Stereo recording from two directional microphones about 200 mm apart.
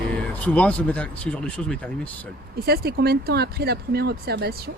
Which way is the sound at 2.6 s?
50° right (ahead or behind).